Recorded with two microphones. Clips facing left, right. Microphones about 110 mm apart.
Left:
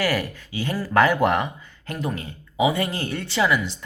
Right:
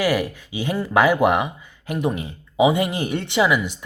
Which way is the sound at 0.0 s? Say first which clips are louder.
Right 3 dB; 15° right (ahead or behind).